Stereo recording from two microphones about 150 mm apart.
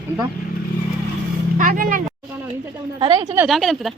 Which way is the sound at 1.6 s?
65° right (ahead or behind).